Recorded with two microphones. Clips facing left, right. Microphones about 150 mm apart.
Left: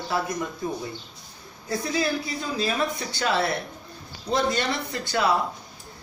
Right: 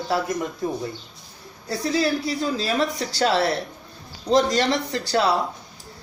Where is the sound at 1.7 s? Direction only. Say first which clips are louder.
Right 3 dB; 35° right (ahead or behind).